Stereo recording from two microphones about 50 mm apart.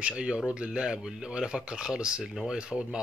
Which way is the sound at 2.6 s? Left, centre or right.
Right.